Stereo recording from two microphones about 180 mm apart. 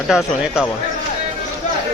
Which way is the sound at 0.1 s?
5° right (ahead or behind).